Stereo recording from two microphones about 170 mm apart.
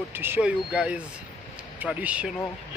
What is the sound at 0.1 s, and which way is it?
Speech, 10° right (ahead or behind).